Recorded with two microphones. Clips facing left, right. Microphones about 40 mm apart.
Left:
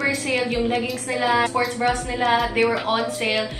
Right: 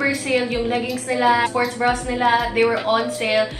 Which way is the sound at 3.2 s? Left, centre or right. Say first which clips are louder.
Right 2 dB; centre.